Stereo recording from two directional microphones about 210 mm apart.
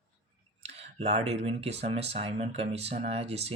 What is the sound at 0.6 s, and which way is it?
Speech, 30° right (ahead or behind).